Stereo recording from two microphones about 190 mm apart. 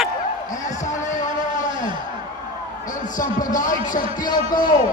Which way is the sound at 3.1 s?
45° left (ahead or behind).